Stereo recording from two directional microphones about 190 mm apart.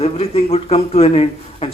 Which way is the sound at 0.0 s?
30° left (ahead or behind).